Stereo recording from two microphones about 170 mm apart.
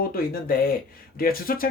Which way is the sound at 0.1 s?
60° left (ahead or behind).